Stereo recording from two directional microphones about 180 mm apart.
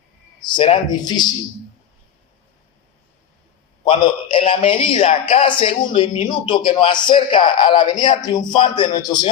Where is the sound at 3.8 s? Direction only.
25° left (ahead or behind).